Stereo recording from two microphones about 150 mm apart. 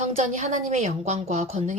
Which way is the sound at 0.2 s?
50° right (ahead or behind).